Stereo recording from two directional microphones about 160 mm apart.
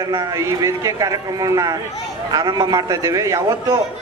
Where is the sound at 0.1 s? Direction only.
20° right (ahead or behind).